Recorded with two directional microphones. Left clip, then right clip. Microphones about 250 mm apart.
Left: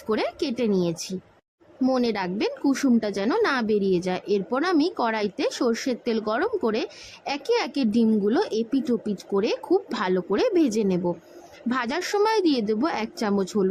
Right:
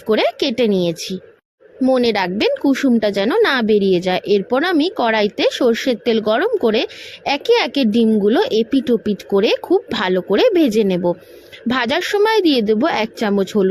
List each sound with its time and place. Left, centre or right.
0.1 s a woman's voice: centre